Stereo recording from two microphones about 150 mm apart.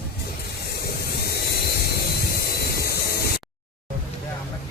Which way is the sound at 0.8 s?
90° left.